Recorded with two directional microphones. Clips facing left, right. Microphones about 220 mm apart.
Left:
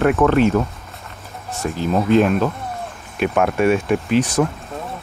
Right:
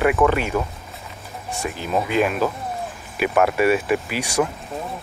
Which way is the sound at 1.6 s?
10° right (ahead or behind).